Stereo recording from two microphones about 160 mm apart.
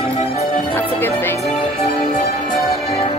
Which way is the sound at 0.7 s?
15° left (ahead or behind).